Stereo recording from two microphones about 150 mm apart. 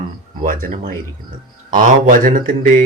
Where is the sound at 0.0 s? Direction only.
65° right (ahead or behind).